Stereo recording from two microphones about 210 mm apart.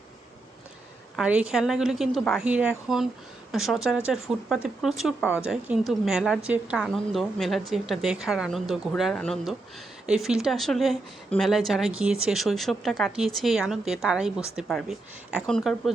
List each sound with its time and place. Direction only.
1.1 s speech: 5° right (ahead or behind)